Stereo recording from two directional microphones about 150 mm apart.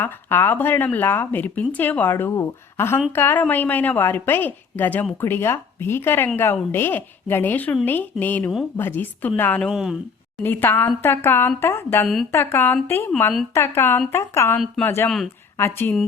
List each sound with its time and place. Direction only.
0.0 s speech: 15° left (ahead or behind)
9.6 s speech: 5° right (ahead or behind)
10.4 s speech: 15° left (ahead or behind)